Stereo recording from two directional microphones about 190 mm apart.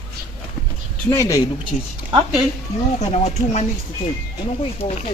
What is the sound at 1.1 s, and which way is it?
Speech, 15° left (ahead or behind).